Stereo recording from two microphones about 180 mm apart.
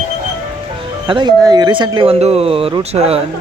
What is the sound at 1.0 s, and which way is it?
Speech, 25° right (ahead or behind).